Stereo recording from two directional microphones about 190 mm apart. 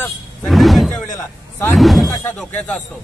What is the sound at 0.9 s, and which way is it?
Speech, 15° left (ahead or behind).